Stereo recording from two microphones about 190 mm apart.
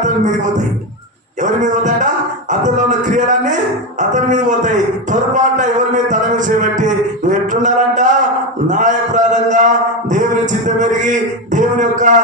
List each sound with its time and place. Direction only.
1.4 s a man's voice: 40° right (ahead or behind)